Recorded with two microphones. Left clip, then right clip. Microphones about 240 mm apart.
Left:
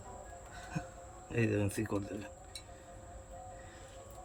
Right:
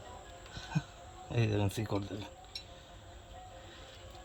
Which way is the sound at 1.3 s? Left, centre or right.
Right.